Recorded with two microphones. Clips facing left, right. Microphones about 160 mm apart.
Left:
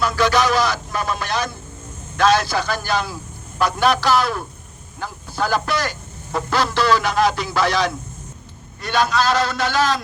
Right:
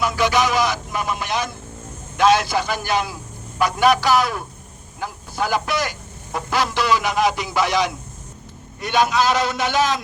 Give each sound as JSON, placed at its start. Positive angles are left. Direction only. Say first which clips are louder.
{"t": 0.0, "sound": "a man's voice", "louder": "left 1 dB", "side_deg": -15}